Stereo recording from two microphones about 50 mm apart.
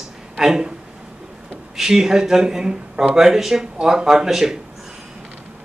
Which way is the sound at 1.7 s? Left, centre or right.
Centre.